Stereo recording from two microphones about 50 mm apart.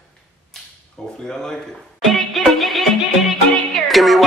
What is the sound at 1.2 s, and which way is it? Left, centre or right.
Speech, centre.